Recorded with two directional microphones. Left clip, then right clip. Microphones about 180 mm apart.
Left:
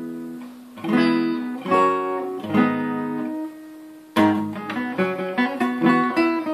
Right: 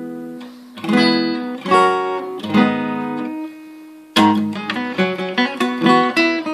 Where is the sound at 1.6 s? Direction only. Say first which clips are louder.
Right 5 dB; 35° right (ahead or behind).